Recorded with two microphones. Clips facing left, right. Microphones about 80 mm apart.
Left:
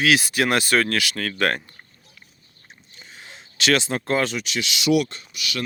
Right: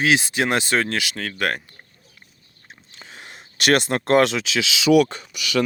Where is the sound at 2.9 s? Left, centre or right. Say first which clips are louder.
Right 2 dB; right.